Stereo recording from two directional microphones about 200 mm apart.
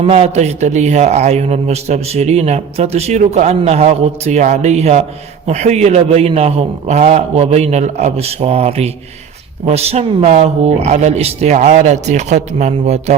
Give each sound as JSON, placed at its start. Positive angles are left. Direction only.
{"t": 0.0, "sound": "a man's voice", "side_deg": -30}